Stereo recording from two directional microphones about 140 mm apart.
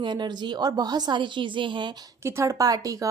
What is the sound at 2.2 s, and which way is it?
Speech, 20° right (ahead or behind).